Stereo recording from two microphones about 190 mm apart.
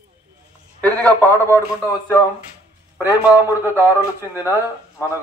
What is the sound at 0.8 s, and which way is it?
A man's voice, 10° left (ahead or behind).